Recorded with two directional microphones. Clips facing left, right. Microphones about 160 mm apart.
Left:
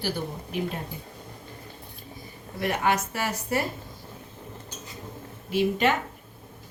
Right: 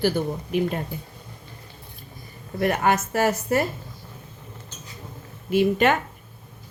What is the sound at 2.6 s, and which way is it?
A woman's voice, 50° right (ahead or behind).